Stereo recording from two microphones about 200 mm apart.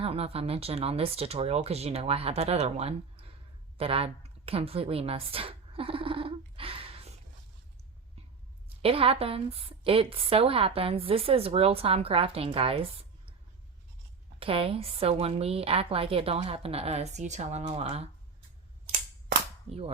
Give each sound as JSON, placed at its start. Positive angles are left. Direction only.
{"t": 0.0, "sound": "speech", "side_deg": -30}
{"t": 3.8, "sound": "a sound", "side_deg": -30}
{"t": 8.8, "sound": "a woman's voice", "side_deg": -30}
{"t": 14.3, "sound": "a woman's voice", "side_deg": -25}